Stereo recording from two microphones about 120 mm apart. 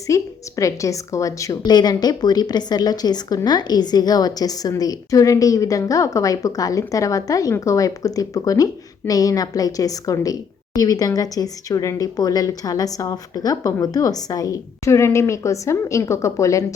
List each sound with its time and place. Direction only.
0.1 s a woman's voice: 25° left (ahead or behind)